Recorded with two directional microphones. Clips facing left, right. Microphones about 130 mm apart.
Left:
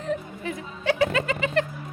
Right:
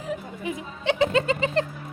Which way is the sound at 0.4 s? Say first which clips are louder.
Even; 20° right (ahead or behind).